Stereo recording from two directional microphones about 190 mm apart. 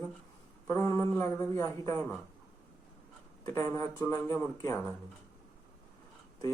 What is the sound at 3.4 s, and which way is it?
A man's voice, 15° left (ahead or behind).